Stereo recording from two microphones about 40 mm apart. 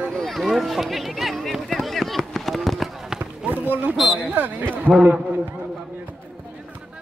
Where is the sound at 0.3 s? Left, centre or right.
Centre.